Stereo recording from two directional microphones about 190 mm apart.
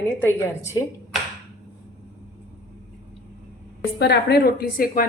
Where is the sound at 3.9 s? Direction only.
60° left (ahead or behind).